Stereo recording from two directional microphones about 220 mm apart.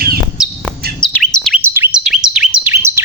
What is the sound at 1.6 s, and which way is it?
Bird, 10° right (ahead or behind).